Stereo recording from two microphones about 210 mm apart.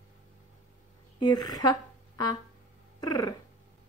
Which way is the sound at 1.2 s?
20° left (ahead or behind).